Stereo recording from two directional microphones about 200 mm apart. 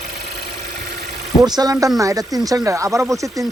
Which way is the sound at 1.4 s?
20° right (ahead or behind).